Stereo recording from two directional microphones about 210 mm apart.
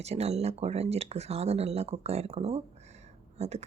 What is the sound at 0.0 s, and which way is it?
Speech, 30° right (ahead or behind).